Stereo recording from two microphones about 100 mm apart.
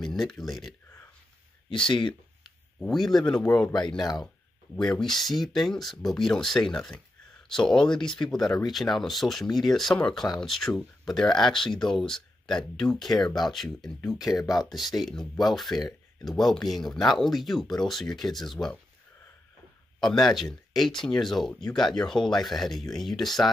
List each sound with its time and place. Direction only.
0.0 s speech: centre (ahead or behind)
1.7 s speech: 55° left (ahead or behind)
2.8 s speech: 5° left (ahead or behind)
4.7 s speech: 5° left (ahead or behind)
20.0 s speech: 5° left (ahead or behind)